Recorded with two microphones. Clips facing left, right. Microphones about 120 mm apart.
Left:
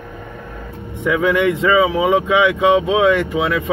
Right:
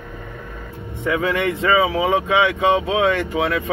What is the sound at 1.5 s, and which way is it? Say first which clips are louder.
Speech: left 3 dB; 20° left (ahead or behind).